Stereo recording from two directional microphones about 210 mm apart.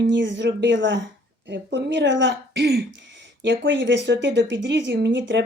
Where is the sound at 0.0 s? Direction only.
60° right (ahead or behind).